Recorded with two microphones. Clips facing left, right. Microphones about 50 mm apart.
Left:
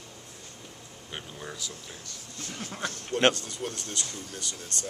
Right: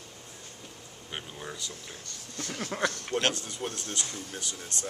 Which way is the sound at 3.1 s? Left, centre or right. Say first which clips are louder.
Left 5 dB; centre.